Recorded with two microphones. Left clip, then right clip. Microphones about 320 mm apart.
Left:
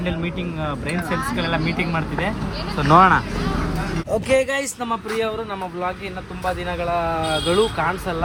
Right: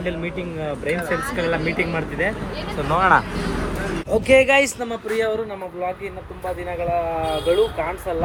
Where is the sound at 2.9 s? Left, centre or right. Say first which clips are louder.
Left 7 dB; left.